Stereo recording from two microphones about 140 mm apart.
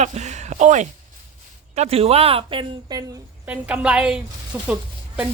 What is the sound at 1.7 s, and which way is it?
Speech, 45° right (ahead or behind).